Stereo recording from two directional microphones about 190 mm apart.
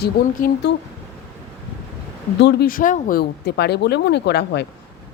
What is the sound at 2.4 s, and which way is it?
Speech, 60° left (ahead or behind).